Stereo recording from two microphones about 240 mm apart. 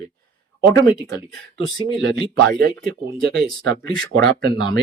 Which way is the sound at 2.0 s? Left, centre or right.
Right.